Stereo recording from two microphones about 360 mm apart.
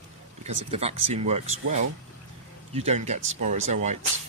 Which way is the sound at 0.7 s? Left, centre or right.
Centre.